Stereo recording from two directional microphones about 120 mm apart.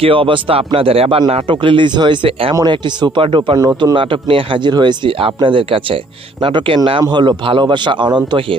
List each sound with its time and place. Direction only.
0.0 s a man's voice: 45° right (ahead or behind)